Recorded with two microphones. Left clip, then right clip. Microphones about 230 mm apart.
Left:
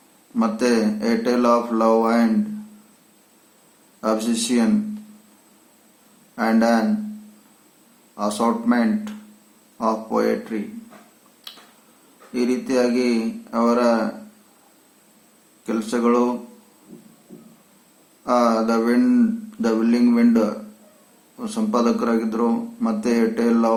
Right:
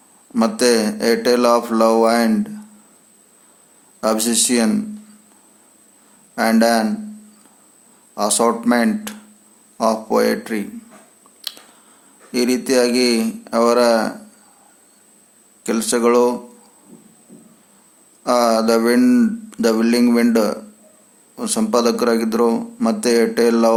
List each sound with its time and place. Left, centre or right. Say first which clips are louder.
0.3 s a man's voice: right 5 dB; right
4.0 s a man's voice: right 4 dB; right
6.3 s a man's voice: right 4 dB; right
8.1 s a man's voice: right 5 dB; right
11.4 s finger snapping: right 9 dB; right
12.3 s a man's voice: right 5 dB; right
15.6 s a man's voice: right 5 dB; right
18.3 s a man's voice: right 4 dB; right